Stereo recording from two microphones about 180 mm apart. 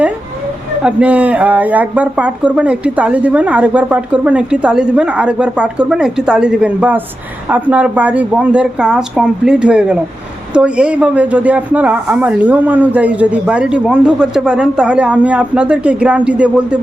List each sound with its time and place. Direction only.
0.8 s speech: 5° right (ahead or behind)